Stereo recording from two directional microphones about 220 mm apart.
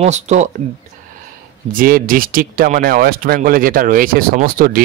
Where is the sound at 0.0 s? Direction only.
30° right (ahead or behind).